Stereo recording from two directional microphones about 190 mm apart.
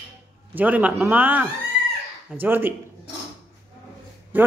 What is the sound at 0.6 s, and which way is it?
Speech, 10° right (ahead or behind).